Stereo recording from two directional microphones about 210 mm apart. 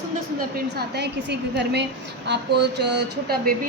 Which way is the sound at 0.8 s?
55° right (ahead or behind).